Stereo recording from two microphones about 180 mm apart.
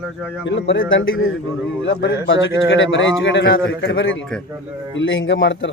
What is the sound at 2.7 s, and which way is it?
Speech, 85° left.